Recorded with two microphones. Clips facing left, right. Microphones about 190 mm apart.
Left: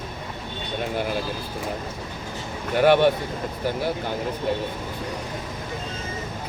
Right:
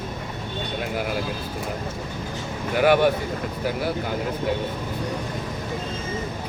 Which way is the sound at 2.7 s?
5° right (ahead or behind).